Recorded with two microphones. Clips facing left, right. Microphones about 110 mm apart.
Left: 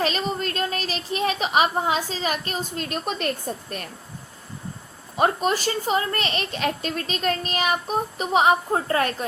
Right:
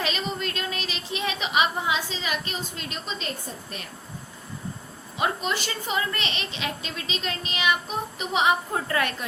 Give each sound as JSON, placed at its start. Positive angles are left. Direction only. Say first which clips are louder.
{"t": 0.0, "sound": "a woman's voice", "louder": "left 4 dB", "side_deg": 40}
{"t": 5.1, "sound": "a woman's voice", "louder": "left 5 dB", "side_deg": 45}